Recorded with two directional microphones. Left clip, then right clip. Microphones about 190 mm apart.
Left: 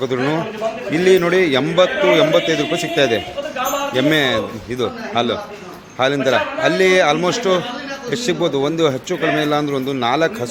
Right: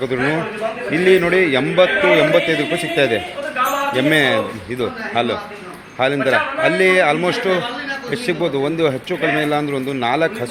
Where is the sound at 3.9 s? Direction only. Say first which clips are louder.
Even; centre (ahead or behind).